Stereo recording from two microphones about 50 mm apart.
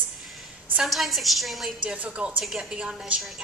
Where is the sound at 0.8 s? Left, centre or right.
Centre.